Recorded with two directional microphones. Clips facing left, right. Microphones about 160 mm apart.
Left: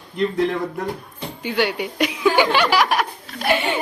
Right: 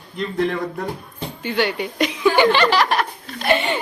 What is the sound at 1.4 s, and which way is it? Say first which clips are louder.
Speech: even; 10° left (ahead or behind).